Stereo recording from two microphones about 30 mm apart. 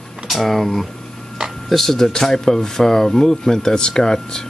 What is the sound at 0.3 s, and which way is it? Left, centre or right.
Speech, centre.